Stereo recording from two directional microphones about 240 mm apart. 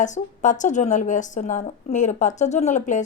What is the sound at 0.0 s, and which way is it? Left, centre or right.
A woman's voice, left.